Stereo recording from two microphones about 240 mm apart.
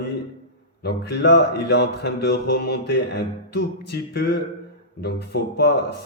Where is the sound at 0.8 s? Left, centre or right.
Left.